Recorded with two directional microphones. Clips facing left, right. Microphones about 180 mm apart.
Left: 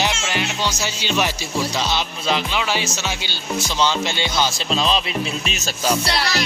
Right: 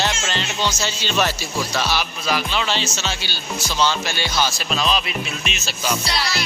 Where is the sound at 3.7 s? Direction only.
20° left (ahead or behind).